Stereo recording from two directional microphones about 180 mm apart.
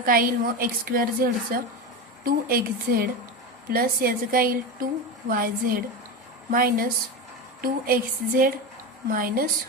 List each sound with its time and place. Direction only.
0.0 s a woman's voice: 50° right (ahead or behind)